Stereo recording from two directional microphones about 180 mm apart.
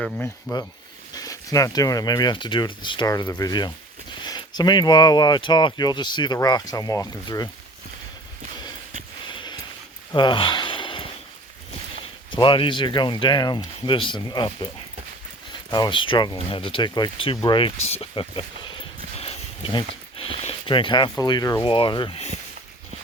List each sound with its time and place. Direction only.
0.0 s speech: 5° left (ahead or behind)
1.1 s speech: 20° left (ahead or behind)
9.2 s a sound: 25° left (ahead or behind)
10.1 s gasp: 25° left (ahead or behind)
12.4 s speech: 25° left (ahead or behind)
15.7 s speech: 25° left (ahead or behind)